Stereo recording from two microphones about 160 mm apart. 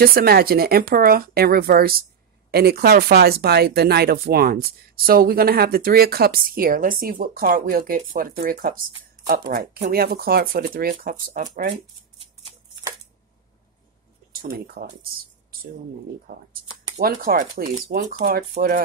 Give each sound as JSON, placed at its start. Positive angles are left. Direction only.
{"t": 0.0, "sound": "speech", "side_deg": -70}
{"t": 2.5, "sound": "speech", "side_deg": -80}
{"t": 14.3, "sound": "speech", "side_deg": -65}
{"t": 16.3, "sound": "speech", "side_deg": -75}
{"t": 17.8, "sound": "speech", "side_deg": -75}